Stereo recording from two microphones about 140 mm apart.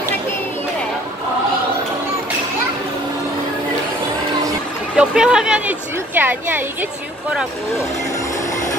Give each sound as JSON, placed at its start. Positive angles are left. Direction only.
{"t": 4.9, "sound": "a woman's voice", "side_deg": -5}